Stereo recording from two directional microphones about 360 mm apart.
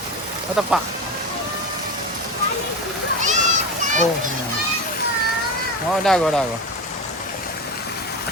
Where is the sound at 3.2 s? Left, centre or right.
Centre.